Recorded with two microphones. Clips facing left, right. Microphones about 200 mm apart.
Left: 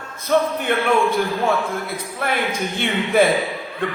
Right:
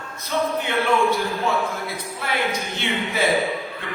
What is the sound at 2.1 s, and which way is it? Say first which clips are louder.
Speech: left 3 dB; 50° left (ahead or behind).